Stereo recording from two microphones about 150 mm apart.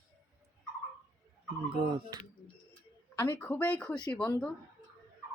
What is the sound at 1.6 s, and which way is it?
Speech, 35° right (ahead or behind).